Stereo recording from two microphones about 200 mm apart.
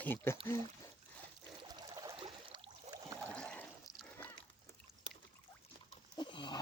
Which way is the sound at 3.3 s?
5° left (ahead or behind).